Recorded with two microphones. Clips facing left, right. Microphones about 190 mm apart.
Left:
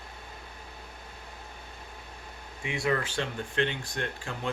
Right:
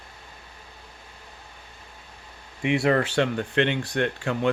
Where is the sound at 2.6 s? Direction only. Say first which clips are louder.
Right 8 dB; 65° right (ahead or behind).